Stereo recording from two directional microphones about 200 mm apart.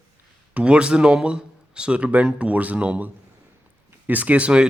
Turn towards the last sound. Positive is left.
turn(degrees=-5)  # may be behind; listen again after turning